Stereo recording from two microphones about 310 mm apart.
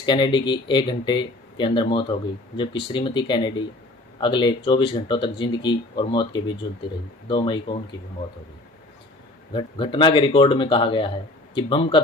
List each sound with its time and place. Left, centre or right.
0.0 s speech: centre
9.5 s speech: centre